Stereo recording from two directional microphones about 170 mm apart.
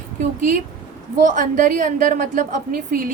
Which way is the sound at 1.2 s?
50° right (ahead or behind).